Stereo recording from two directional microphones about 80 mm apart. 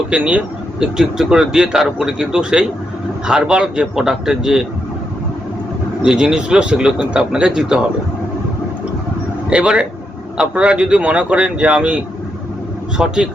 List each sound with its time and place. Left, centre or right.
0.1 s a man's voice: centre
6.1 s a man's voice: centre
9.5 s a man's voice: centre
13.0 s a man's voice: centre